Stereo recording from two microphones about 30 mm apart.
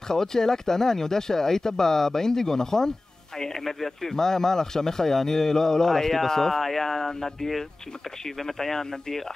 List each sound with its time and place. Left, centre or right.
0.1 s speech: centre